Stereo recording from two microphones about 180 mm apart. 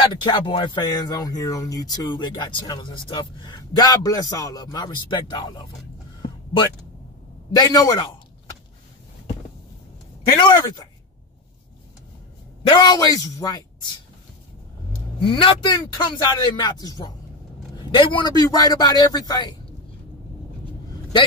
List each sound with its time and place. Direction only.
0.1 s speech: 25° left (ahead or behind)
7.5 s speech: 20° left (ahead or behind)
10.4 s speech: 25° left (ahead or behind)
12.6 s speech: 25° left (ahead or behind)
15.2 s speech: 30° left (ahead or behind)